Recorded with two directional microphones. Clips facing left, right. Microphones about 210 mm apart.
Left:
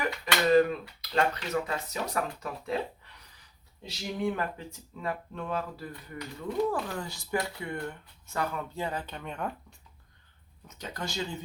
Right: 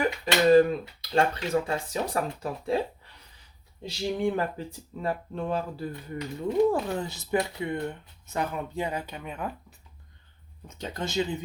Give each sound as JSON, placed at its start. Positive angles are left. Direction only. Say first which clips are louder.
{"t": 0.0, "sound": "speech", "louder": "right 5 dB", "side_deg": -30}
{"t": 3.8, "sound": "speech", "louder": "right 4 dB", "side_deg": -30}
{"t": 10.7, "sound": "speech", "louder": "right 4 dB", "side_deg": -25}